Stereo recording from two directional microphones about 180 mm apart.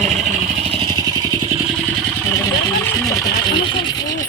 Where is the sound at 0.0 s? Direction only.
40° right (ahead or behind).